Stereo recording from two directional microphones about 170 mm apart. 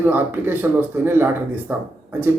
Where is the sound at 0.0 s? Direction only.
10° right (ahead or behind).